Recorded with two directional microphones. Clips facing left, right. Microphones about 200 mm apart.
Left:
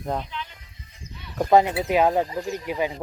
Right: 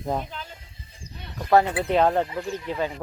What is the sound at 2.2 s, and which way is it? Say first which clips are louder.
Speech: left 1 dB; 35° left (ahead or behind).